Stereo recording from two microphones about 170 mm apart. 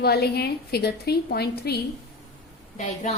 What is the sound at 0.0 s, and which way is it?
A woman's voice, 70° left (ahead or behind).